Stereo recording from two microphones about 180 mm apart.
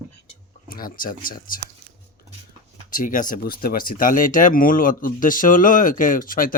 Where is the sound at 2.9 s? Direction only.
50° left (ahead or behind).